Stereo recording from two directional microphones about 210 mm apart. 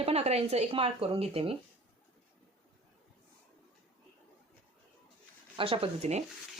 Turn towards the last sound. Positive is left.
turn(degrees=-30)  # may be behind; listen again after turning